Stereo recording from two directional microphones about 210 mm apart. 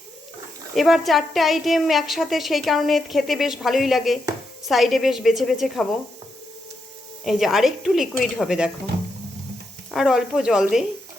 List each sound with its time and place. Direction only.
0.8 s a woman's voice: centre (ahead or behind)
7.3 s a woman's voice: centre (ahead or behind)
9.9 s a woman's voice: centre (ahead or behind)